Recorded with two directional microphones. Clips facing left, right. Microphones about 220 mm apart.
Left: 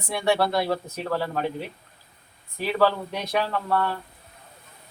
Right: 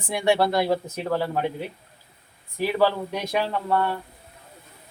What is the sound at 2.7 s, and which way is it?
Speech, 15° right (ahead or behind).